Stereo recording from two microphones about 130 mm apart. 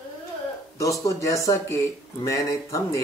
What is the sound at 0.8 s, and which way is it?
Speech, 25° left (ahead or behind).